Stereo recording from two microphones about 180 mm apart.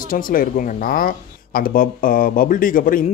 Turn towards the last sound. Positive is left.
turn(degrees=50)  # may be behind; listen again after turning